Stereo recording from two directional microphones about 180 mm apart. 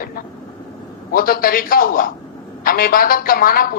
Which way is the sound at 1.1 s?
55° left (ahead or behind).